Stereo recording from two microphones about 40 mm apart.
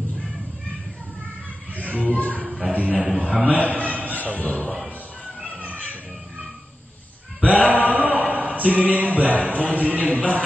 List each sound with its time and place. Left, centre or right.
2.0 s speech: left
2.7 s a man's voice: right
3.9 s a sound: left
4.4 s speech: left
5.4 s children playing: right
7.4 s speech: right
10.1 s speech: left